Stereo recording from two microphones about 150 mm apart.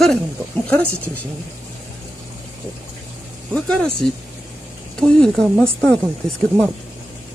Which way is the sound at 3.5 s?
5° left (ahead or behind).